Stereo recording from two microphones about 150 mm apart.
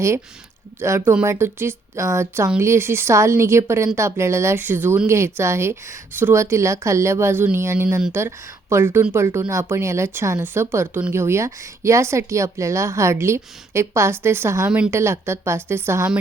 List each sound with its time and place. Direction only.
0.8 s a woman's voice: 15° right (ahead or behind)